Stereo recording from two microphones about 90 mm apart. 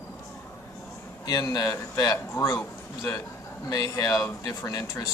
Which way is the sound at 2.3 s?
30° left (ahead or behind).